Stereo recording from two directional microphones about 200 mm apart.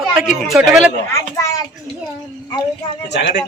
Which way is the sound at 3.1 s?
60° left (ahead or behind).